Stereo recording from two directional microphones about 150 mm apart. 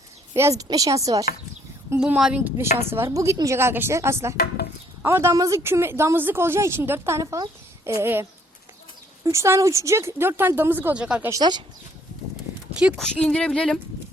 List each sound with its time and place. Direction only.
0.3 s a woman's voice: 20° right (ahead or behind)
2.0 s speech: 5° right (ahead or behind)
11.3 s a woman's voice: 25° right (ahead or behind)
13.0 s speech: 5° left (ahead or behind)